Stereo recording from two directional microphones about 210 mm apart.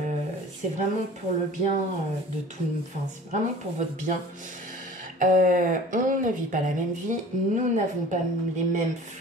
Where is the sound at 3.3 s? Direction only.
35° right (ahead or behind).